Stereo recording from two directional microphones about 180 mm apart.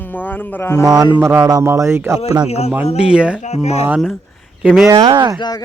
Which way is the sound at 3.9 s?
5° right (ahead or behind).